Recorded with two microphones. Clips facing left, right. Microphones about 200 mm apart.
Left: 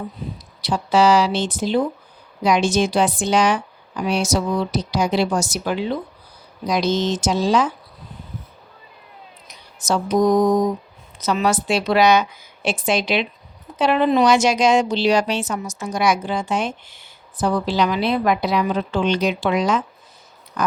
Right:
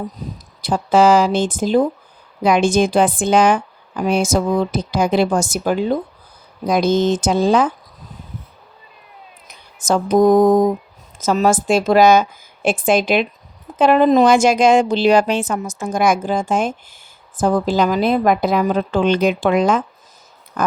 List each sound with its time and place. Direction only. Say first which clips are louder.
0.2 s speech: right 1 dB; 50° right (ahead or behind)
9.5 s speech: right 4 dB; 50° right (ahead or behind)
20.6 s a sound: right 2 dB; 50° right (ahead or behind)